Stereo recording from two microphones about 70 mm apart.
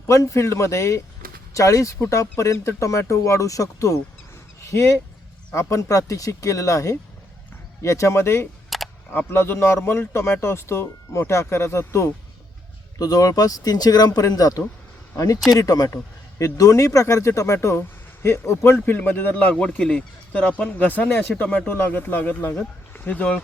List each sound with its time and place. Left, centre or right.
0.1 s speech: left
4.7 s speech: left
8.7 s camera: centre
9.1 s speech: left
13.0 s speech: left
18.9 s speech: left
22.9 s a sound: left